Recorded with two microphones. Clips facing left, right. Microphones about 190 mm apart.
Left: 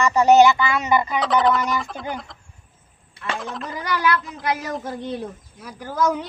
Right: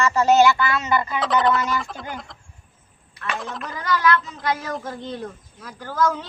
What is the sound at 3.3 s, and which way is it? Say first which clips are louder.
Music: left 1 dB; centre (ahead or behind).